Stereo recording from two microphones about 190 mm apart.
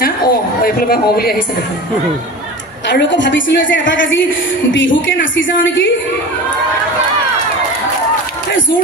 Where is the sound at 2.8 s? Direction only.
70° left (ahead or behind).